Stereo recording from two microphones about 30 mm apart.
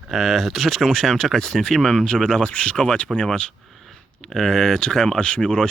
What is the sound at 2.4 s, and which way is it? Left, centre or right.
Speech, left.